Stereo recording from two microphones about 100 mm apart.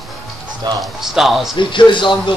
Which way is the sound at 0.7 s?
45° right (ahead or behind).